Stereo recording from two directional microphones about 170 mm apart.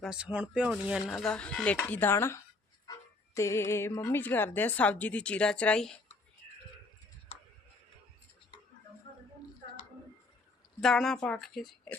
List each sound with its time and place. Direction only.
0.0 s speech: 5° right (ahead or behind)
7.3 s tick: 35° left (ahead or behind)
10.8 s speech: centre (ahead or behind)